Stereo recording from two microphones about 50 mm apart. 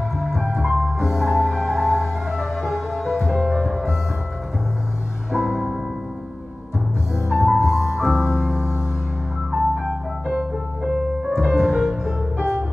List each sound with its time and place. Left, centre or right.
0.2 s music: centre
5.3 s music: centre
7.2 s music: centre
9.5 s music: centre